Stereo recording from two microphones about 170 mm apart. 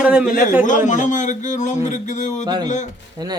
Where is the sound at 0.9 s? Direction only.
45° left (ahead or behind).